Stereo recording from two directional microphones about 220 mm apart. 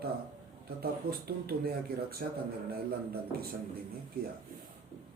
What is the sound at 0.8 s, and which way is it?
Speech, 45° right (ahead or behind).